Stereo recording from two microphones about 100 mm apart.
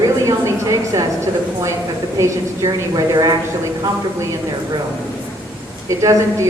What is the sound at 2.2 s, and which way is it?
A woman's voice, 35° right (ahead or behind).